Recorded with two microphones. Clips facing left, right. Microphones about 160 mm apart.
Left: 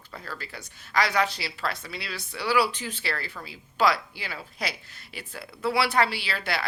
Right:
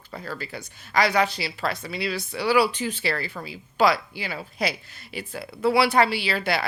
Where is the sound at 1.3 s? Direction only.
5° right (ahead or behind).